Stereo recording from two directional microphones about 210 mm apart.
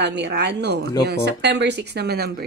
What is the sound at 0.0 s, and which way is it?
Speech, 55° right (ahead or behind).